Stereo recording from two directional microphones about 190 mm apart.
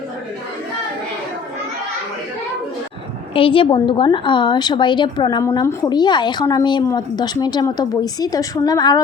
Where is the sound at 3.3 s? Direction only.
25° left (ahead or behind).